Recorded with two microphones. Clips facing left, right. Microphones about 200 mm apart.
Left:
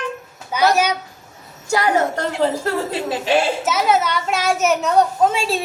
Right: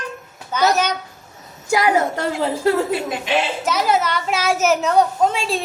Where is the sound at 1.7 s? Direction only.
10° right (ahead or behind).